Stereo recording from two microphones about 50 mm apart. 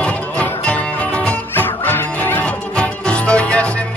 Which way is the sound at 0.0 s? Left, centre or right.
Left.